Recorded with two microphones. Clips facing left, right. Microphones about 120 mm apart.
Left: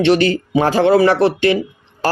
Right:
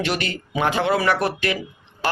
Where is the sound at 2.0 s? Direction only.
40° left (ahead or behind).